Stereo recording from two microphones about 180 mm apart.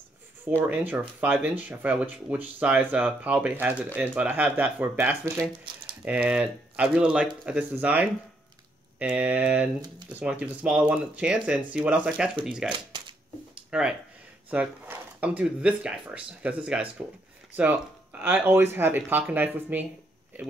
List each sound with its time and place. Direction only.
0.7 s speech: 5° right (ahead or behind)
12.6 s speech: 25° right (ahead or behind)
13.7 s speech: 5° right (ahead or behind)